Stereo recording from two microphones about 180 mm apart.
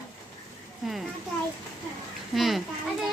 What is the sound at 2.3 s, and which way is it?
Speech, centre (ahead or behind).